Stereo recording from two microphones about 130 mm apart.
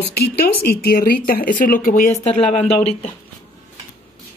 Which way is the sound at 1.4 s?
90° left.